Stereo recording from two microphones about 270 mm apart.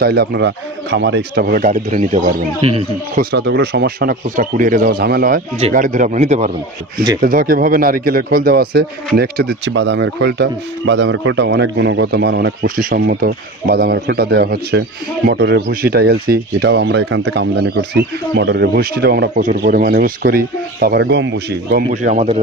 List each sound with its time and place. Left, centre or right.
0.0 s a man's voice: right
3.3 s a man's voice: right